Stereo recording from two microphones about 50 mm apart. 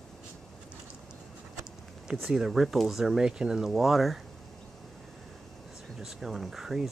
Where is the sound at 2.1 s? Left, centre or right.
Centre.